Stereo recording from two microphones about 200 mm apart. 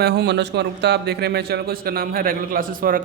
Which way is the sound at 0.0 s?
55° right (ahead or behind).